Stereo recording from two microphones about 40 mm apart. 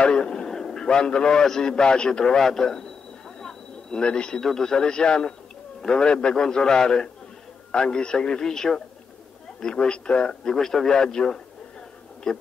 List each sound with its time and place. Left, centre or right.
0.0 s a man's voice: left
3.3 s a sound: centre
4.4 s a man's voice: centre
10.5 s a man's voice: centre